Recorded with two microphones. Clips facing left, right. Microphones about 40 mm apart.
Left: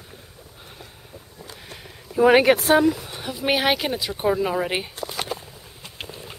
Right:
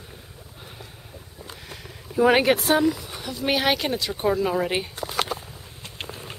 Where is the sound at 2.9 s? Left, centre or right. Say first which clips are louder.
Left 2 dB; centre.